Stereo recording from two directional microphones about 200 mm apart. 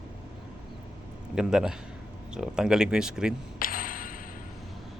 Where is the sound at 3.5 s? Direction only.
45° left (ahead or behind).